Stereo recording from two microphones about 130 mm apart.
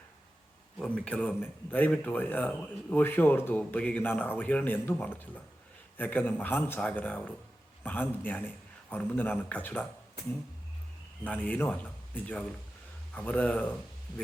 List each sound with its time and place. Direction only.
0.8 s speech: 5° left (ahead or behind)
11.2 s speech: 10° left (ahead or behind)